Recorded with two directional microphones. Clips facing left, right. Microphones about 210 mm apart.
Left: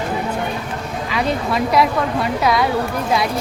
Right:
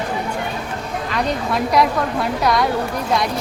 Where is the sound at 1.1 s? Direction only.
Centre (ahead or behind).